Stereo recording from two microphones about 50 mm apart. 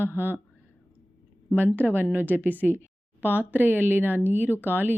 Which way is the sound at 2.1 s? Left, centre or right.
Right.